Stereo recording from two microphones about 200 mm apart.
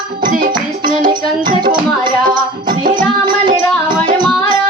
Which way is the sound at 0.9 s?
20° right (ahead or behind).